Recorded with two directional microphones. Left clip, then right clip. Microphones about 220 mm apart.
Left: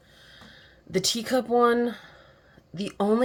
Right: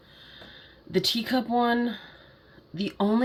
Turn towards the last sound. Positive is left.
turn(degrees=40)  # may be behind; listen again after turning